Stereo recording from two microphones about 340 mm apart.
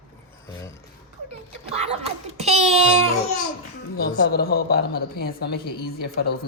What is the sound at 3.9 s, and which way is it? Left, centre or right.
A woman's voice, left.